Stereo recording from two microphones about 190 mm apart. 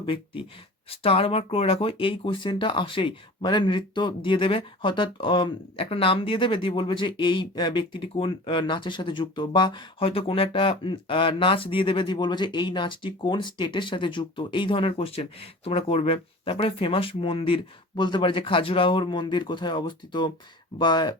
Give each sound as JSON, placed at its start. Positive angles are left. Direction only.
{"t": 0.0, "sound": "speech", "side_deg": 25}